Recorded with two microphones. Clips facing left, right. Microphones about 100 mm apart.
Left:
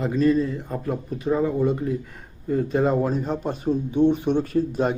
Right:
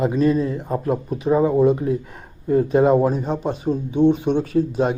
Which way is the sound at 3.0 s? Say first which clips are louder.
Right 4 dB; 5° right (ahead or behind).